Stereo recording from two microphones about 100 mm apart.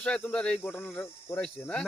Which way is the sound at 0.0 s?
10° left (ahead or behind).